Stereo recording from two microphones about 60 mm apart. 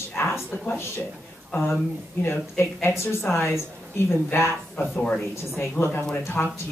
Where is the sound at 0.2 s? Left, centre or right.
Left.